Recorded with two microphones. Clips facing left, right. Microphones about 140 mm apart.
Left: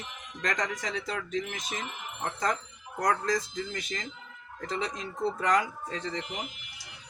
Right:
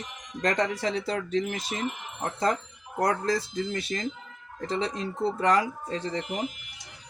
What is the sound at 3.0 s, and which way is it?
Speech, 30° right (ahead or behind).